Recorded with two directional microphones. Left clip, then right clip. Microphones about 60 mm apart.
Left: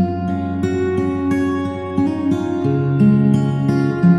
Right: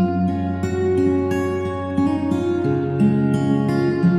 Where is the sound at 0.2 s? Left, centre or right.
Left.